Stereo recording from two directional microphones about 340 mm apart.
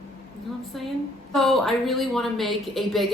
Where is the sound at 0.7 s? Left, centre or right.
Centre.